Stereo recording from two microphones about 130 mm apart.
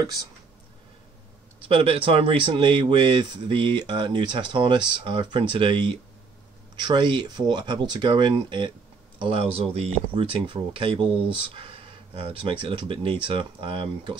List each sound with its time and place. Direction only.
0.0 s speech: 30° right (ahead or behind)
1.7 s speech: 45° right (ahead or behind)
9.2 s speech: 50° right (ahead or behind)